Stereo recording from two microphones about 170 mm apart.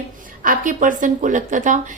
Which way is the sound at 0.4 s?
50° right (ahead or behind).